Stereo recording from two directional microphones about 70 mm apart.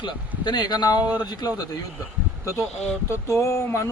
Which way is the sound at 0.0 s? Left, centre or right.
Left.